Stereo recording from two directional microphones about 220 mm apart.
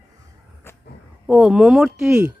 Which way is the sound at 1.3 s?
5° right (ahead or behind).